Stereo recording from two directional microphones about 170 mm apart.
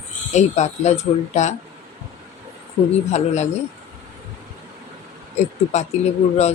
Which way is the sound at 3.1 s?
40° left (ahead or behind).